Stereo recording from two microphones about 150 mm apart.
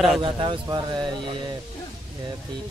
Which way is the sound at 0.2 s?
30° right (ahead or behind).